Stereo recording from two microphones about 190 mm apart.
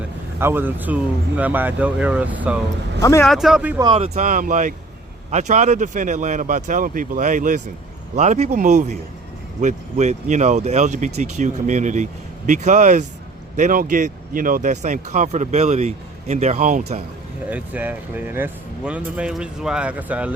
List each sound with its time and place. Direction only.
0.3 s speech: 10° right (ahead or behind)
3.0 s speech: 15° left (ahead or behind)
3.2 s speech: centre (ahead or behind)
3.9 s speech: 35° right (ahead or behind)
17.5 s speech: 10° right (ahead or behind)